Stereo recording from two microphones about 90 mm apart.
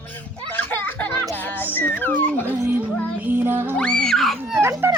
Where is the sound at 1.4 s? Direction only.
20° left (ahead or behind).